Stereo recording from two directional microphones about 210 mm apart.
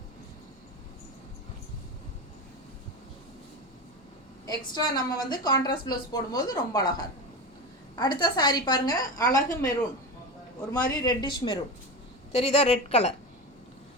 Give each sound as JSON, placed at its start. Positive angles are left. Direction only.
{"t": 4.4, "sound": "a woman's voice", "side_deg": 20}